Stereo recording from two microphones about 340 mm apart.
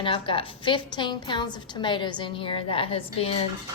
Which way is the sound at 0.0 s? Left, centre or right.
Centre.